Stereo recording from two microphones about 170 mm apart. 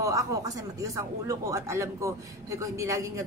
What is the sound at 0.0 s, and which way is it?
Speech, 20° right (ahead or behind).